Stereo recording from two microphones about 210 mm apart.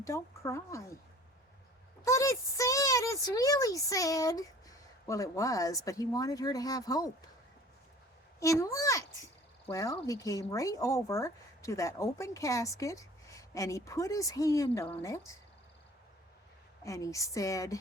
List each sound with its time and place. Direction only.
0.0 s speech: 15° left (ahead or behind)
2.0 s speech: 15° left (ahead or behind)
8.4 s speech: 15° left (ahead or behind)
16.8 s speech: 15° left (ahead or behind)